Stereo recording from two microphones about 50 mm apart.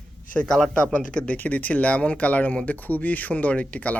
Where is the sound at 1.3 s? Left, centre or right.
Left.